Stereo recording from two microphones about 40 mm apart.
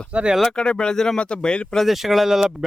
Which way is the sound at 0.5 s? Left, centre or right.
Left.